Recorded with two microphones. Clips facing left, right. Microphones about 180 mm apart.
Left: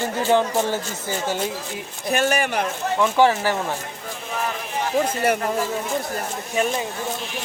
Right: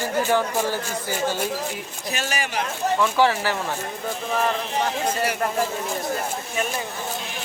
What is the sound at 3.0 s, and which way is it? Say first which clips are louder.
Speech: left 4 dB; 15° left (ahead or behind).